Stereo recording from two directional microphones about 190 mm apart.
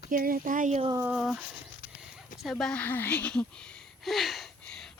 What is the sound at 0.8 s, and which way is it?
Speech, 20° right (ahead or behind).